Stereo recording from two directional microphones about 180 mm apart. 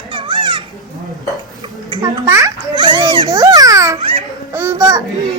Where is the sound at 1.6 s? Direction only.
20° right (ahead or behind).